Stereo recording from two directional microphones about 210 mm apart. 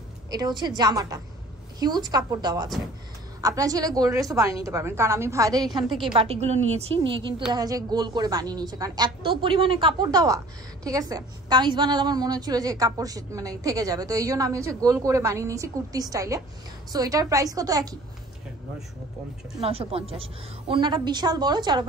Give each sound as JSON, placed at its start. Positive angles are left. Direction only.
{"t": 0.3, "sound": "a woman's voice", "side_deg": -20}
{"t": 19.6, "sound": "a woman's voice", "side_deg": -25}